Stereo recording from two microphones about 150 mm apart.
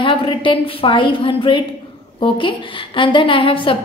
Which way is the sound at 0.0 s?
35° left (ahead or behind).